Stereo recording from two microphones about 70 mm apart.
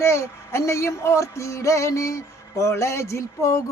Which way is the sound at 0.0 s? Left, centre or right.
Left.